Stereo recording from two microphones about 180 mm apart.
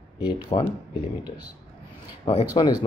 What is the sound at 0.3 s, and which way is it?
Speech, 25° left (ahead or behind).